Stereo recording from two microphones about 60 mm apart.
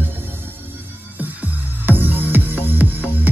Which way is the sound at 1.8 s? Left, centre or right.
Right.